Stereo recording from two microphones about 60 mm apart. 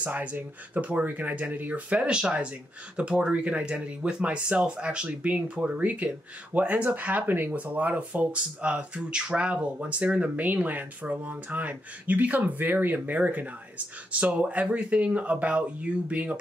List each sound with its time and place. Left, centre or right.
0.0 s speech: right